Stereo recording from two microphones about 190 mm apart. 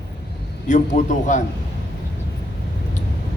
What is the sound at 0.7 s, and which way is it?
Speech, 40° left (ahead or behind).